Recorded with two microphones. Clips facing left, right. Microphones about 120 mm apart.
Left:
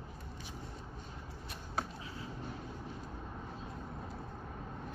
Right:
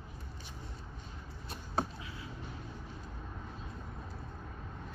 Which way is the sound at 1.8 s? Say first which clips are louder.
Right 4 dB; 30° right (ahead or behind).